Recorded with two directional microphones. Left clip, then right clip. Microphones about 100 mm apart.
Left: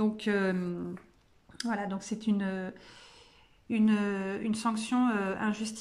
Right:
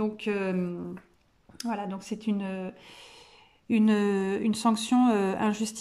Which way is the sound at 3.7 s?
35° right (ahead or behind).